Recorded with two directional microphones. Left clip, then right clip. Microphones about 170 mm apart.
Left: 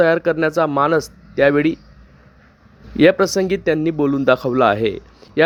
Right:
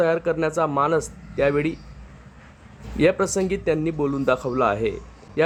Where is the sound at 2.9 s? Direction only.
35° left (ahead or behind).